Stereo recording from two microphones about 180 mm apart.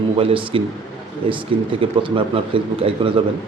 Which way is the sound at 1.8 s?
30° right (ahead or behind).